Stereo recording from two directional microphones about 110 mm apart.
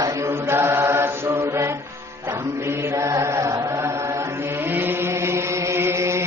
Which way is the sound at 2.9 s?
30° right (ahead or behind).